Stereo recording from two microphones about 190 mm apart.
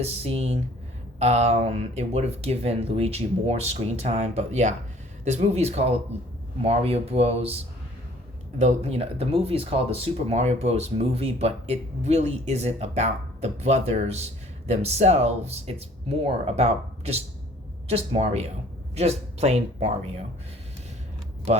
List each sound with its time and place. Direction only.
0.0 s speech: 35° right (ahead or behind)